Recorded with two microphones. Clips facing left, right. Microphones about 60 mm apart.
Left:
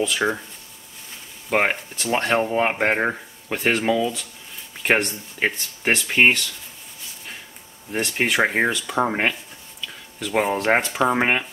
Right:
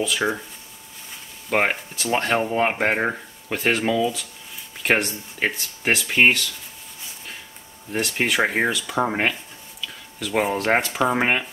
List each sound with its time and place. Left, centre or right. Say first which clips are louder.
0.0 s speech: left 1 dB; centre
1.5 s speech: left 1 dB; centre
7.9 s speech: even; centre